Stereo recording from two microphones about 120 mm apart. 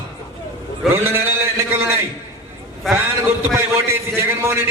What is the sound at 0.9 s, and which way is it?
A man's voice, 20° right (ahead or behind).